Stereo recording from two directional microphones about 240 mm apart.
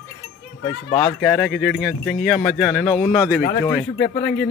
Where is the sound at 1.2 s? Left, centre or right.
Centre.